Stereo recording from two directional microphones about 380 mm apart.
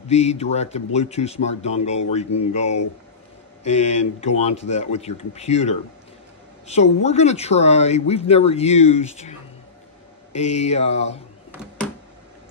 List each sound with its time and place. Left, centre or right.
0.1 s speech: centre
10.3 s speech: centre